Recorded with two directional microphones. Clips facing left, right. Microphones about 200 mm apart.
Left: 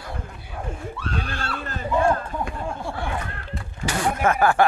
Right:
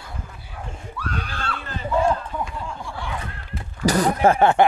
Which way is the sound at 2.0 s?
55° left (ahead or behind).